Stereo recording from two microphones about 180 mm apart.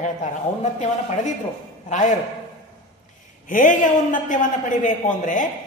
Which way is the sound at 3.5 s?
45° left (ahead or behind).